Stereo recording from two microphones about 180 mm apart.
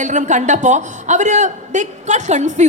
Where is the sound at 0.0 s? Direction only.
45° right (ahead or behind).